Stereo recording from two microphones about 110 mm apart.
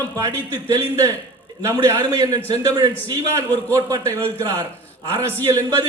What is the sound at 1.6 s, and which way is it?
A man's voice, 25° right (ahead or behind).